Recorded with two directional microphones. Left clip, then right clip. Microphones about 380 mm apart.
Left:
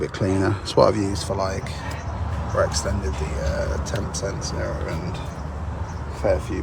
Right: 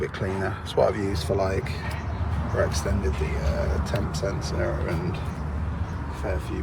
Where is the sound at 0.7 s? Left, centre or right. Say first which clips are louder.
Left 5 dB; left.